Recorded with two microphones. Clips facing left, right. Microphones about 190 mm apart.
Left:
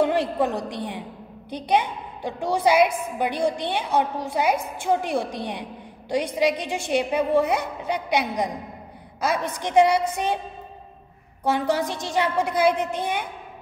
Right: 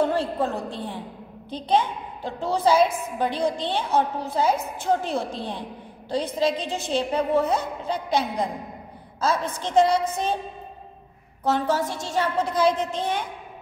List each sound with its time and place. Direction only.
0.0 s a woman's voice: 15° left (ahead or behind)
11.4 s a woman's voice: 15° left (ahead or behind)